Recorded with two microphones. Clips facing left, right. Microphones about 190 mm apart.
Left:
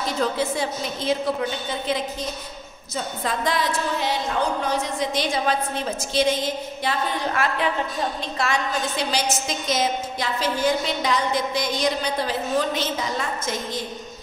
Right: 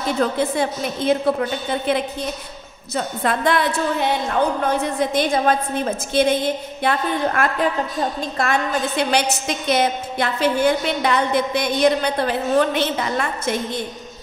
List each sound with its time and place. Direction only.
0.2 s a woman's voice: 55° right (ahead or behind)